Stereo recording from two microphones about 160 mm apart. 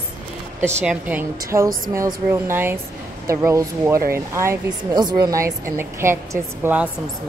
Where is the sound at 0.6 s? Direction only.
15° right (ahead or behind).